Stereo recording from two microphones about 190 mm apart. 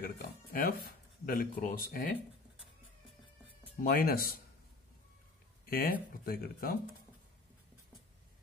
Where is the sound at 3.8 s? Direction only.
50° left (ahead or behind).